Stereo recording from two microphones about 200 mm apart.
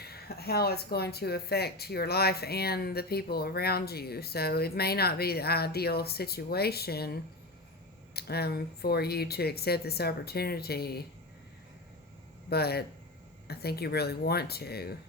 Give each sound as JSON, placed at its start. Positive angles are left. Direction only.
{"t": 0.0, "sound": "speech", "side_deg": 50}
{"t": 12.5, "sound": "speech", "side_deg": 50}